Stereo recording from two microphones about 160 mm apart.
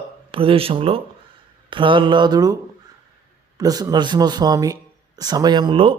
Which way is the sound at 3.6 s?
25° right (ahead or behind).